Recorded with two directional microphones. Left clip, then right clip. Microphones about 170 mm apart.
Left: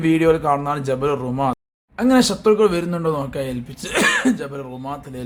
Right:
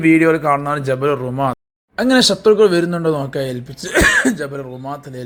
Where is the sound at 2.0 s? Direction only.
20° right (ahead or behind).